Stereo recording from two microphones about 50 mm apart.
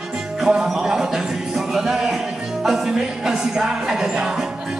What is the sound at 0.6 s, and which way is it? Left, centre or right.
Music, centre.